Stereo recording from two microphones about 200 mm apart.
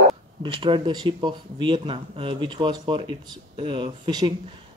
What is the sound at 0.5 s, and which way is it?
Speech, 25° right (ahead or behind).